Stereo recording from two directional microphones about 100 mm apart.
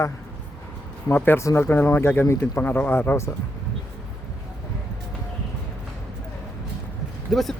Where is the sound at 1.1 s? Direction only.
20° left (ahead or behind).